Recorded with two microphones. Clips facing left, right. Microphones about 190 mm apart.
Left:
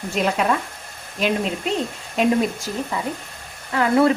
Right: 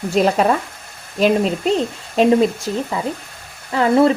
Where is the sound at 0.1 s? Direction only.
35° right (ahead or behind).